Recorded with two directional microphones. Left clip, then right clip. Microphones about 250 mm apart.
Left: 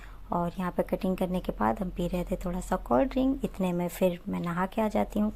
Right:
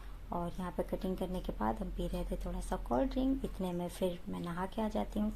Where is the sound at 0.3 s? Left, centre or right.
Left.